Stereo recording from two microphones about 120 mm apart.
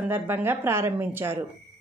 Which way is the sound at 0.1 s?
20° right (ahead or behind).